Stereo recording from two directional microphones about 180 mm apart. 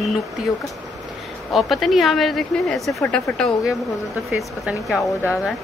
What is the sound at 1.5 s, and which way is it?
A woman's voice, centre (ahead or behind).